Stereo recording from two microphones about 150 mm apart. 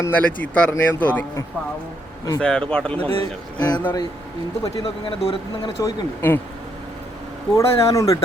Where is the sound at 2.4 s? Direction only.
5° left (ahead or behind).